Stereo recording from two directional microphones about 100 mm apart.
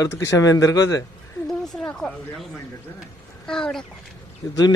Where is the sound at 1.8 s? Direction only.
5° left (ahead or behind).